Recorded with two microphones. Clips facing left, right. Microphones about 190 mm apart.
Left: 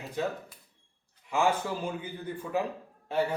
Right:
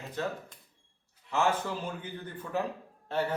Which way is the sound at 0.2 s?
15° left (ahead or behind).